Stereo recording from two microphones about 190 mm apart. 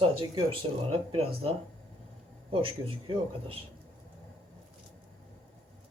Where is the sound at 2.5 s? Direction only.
30° right (ahead or behind).